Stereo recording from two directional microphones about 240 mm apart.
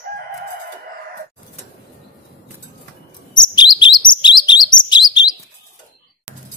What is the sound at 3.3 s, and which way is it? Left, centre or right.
Chirp, centre.